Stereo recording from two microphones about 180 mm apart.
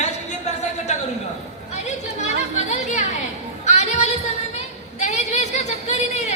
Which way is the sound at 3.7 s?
40° left (ahead or behind).